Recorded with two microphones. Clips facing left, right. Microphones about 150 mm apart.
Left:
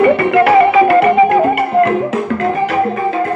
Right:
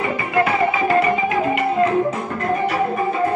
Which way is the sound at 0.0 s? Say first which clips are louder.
Left 10 dB; 70° left (ahead or behind).